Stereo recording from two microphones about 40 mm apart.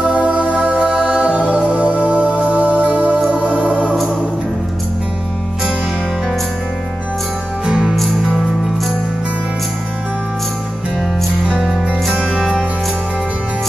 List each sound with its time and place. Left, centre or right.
0.0 s music: right
11.6 s music: centre